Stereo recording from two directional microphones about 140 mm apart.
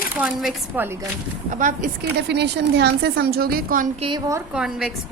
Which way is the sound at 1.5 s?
65° right (ahead or behind).